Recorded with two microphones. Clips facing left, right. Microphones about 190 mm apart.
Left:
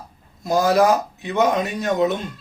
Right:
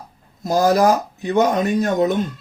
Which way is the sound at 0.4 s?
40° right (ahead or behind).